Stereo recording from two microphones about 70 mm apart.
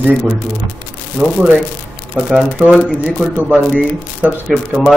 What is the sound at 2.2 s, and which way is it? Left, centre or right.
Speech, centre.